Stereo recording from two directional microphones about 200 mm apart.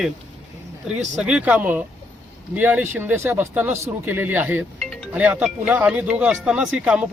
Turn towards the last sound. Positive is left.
turn(degrees=-5)  # may be behind; listen again after turning